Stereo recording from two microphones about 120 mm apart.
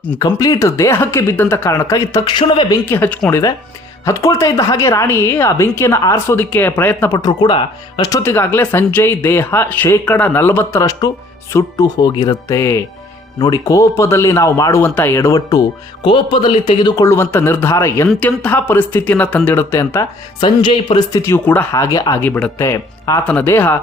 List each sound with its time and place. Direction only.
0.2 s speech: 30° left (ahead or behind)
1.9 s speech: 35° left (ahead or behind)
2.8 s speech: 15° left (ahead or behind)
7.2 s speech: 40° left (ahead or behind)
8.1 s speech: 20° left (ahead or behind)
10.8 s speech: 30° left (ahead or behind)
16.0 s a man's voice: 45° left (ahead or behind)
17.0 s speech: 20° left (ahead or behind)
20.4 s speech: 40° left (ahead or behind)
21.2 s speech: 20° left (ahead or behind)
21.8 s speech: 30° left (ahead or behind)
22.2 s speech: 10° left (ahead or behind)
22.5 s speech: 25° left (ahead or behind)
23.2 s speech: 15° left (ahead or behind)